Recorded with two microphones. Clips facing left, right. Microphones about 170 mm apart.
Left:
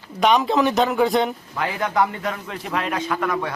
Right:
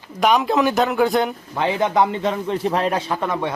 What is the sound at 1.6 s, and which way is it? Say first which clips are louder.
A man's voice: right 4 dB; 25° right (ahead or behind).